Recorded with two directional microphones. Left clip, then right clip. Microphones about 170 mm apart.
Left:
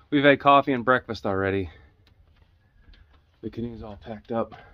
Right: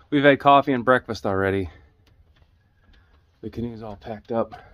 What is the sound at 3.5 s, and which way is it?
Speech, 40° right (ahead or behind).